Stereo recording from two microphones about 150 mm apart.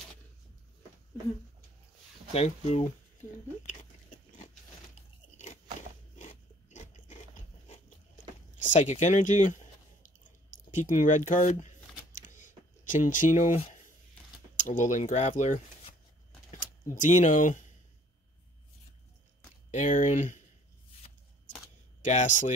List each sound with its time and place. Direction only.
2.3 s speech: 45° left (ahead or behind)
3.6 s a sound: 55° left (ahead or behind)
5.4 s biting: 55° left (ahead or behind)
8.5 s speech: 55° left (ahead or behind)
10.0 s a sound: 55° left (ahead or behind)
14.6 s speech: 60° left (ahead or behind)
19.7 s speech: 55° left (ahead or behind)
22.0 s speech: 55° left (ahead or behind)